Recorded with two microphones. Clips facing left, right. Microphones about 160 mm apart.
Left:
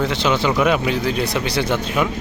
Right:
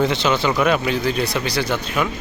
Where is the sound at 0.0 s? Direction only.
5° left (ahead or behind).